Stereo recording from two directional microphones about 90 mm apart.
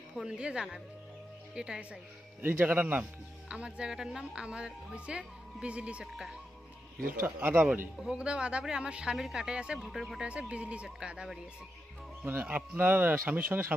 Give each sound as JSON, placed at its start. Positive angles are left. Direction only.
{"t": 0.2, "sound": "speech", "side_deg": -10}
{"t": 2.4, "sound": "speech", "side_deg": -20}
{"t": 7.2, "sound": "speech", "side_deg": -20}
{"t": 8.0, "sound": "speech", "side_deg": -10}
{"t": 12.3, "sound": "speech", "side_deg": -20}